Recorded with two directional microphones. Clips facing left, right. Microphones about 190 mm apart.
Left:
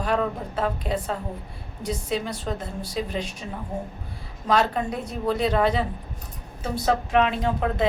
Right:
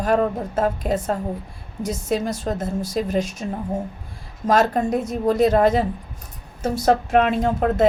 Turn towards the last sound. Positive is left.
turn(degrees=-45)  # may be behind; listen again after turning